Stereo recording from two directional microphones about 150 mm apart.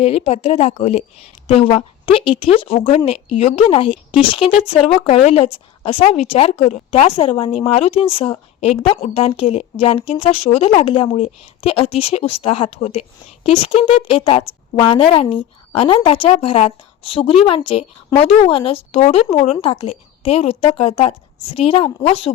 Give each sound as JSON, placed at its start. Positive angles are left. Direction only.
{"t": 0.0, "sound": "speech", "side_deg": 45}